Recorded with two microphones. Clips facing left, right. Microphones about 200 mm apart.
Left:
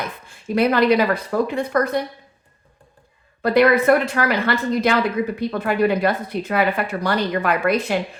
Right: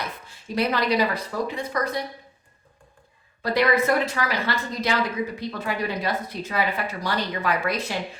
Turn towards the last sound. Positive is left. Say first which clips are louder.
# left 6 dB
turn(degrees=55)  # may be behind; listen again after turning